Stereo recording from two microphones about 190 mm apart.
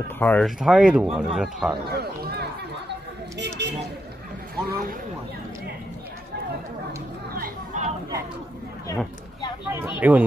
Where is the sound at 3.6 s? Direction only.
65° right (ahead or behind).